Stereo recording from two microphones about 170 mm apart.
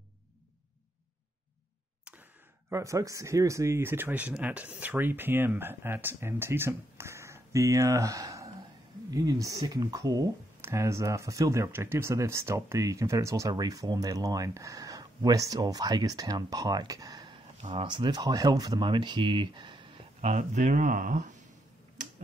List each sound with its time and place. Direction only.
2.7 s speech: 20° right (ahead or behind)
17.6 s speech: 35° right (ahead or behind)
20.2 s speech: 40° right (ahead or behind)